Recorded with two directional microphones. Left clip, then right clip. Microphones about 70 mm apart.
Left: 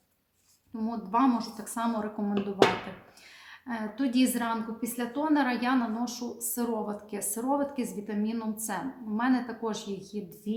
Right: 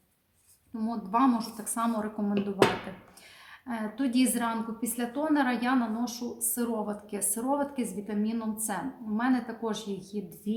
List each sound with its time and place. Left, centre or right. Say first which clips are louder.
0.8 s a woman's voice: even; right
3.7 s a woman's voice: even; right